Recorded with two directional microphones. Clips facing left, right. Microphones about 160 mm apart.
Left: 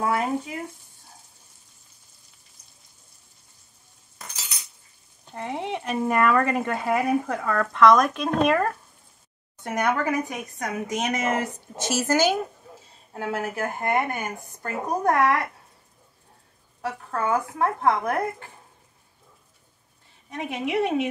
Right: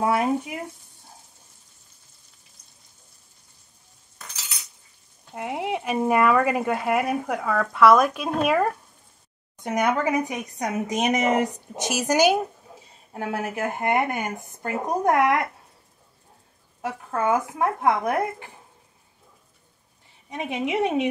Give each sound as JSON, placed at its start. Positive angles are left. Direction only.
{"t": 0.0, "sound": "speech", "side_deg": -20}
{"t": 5.3, "sound": "speech", "side_deg": -5}
{"t": 9.6, "sound": "speech", "side_deg": -15}
{"t": 16.8, "sound": "speech", "side_deg": -20}
{"t": 20.2, "sound": "speech", "side_deg": -20}